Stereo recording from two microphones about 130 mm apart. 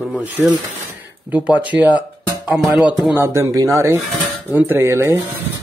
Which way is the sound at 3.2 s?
20° right (ahead or behind).